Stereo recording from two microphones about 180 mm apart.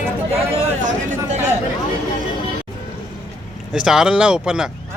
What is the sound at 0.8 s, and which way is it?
Speech, 40° right (ahead or behind).